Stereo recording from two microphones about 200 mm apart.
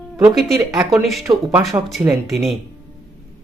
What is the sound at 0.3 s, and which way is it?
Speech, centre (ahead or behind).